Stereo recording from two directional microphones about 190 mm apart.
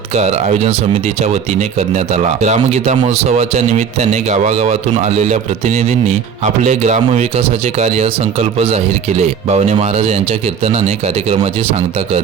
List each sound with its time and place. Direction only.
0.1 s a man's voice: 35° right (ahead or behind)